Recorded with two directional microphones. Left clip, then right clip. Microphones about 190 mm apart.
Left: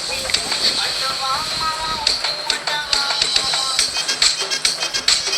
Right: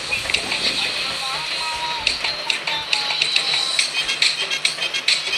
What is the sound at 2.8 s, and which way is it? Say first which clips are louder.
Music: left 2 dB; 60° left (ahead or behind).